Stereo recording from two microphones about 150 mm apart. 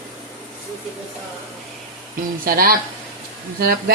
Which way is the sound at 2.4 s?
80° right.